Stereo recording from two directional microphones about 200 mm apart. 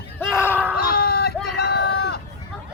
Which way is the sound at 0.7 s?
50° left (ahead or behind).